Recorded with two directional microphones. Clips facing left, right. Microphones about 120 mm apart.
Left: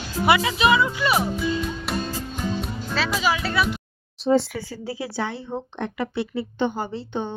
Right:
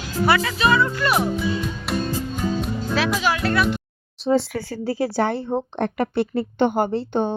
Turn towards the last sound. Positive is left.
turn(degrees=-50)  # may be behind; listen again after turning